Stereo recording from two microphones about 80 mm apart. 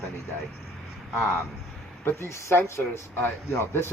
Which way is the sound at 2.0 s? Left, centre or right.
Left.